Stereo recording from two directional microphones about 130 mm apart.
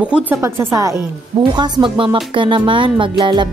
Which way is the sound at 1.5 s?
35° right (ahead or behind).